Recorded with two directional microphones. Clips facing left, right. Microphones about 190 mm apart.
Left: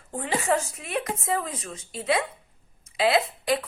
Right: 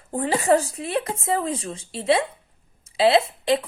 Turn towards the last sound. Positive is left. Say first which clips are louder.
# right 4 dB
turn(degrees=-25)  # may be behind; listen again after turning